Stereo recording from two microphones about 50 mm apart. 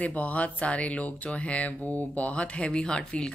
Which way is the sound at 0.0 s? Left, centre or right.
Left.